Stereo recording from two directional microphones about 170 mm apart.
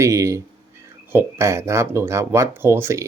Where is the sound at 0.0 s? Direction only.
15° right (ahead or behind).